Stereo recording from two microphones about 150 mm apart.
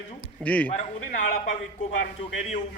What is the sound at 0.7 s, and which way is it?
A man's voice, 60° left (ahead or behind).